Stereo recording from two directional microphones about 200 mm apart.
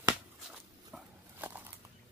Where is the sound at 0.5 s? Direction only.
5° right (ahead or behind).